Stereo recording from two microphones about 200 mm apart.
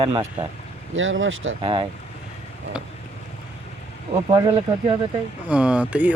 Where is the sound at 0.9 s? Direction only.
75° right (ahead or behind).